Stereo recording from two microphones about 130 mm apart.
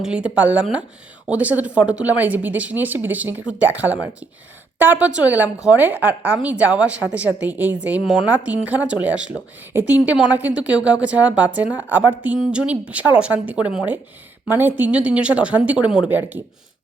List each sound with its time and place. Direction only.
0.0 s a woman's voice: 10° right (ahead or behind)